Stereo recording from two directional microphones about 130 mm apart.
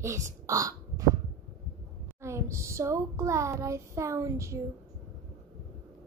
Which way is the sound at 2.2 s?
20° right (ahead or behind).